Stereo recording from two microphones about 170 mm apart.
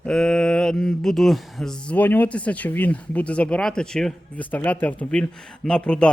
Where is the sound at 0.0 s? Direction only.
5° left (ahead or behind).